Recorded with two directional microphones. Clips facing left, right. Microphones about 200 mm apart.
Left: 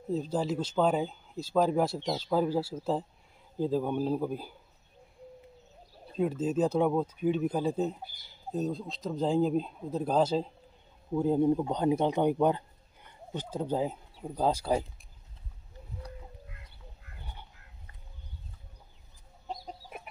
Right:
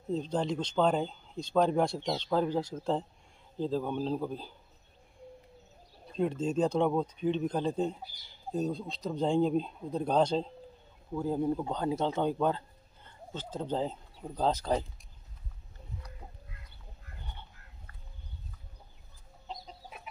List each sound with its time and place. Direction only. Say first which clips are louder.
0.1 s a man's voice: left 1 dB; 5° left (ahead or behind)
6.1 s speech: left 1 dB; 5° left (ahead or behind)
11.1 s speech: left 5 dB; 20° left (ahead or behind)
17.2 s a sound: left 1 dB; 10° left (ahead or behind)
19.4 s chicken: left 4 dB; 55° left (ahead or behind)